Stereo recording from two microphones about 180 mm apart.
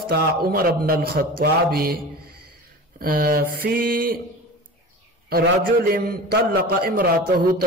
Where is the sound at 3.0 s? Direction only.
55° right (ahead or behind).